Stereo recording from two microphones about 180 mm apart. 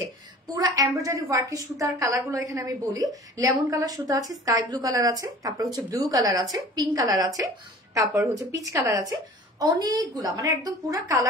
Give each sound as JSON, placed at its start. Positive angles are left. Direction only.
{"t": 0.9, "sound": "a woman's voice", "side_deg": -20}